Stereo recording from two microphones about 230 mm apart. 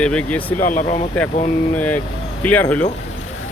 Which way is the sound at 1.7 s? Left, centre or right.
Centre.